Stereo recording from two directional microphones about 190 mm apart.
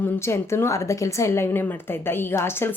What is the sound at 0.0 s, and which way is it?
A woman's voice, 15° left (ahead or behind).